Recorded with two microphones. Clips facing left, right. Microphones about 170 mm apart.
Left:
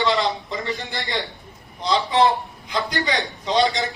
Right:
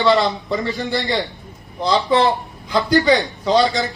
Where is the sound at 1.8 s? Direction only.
Centre (ahead or behind).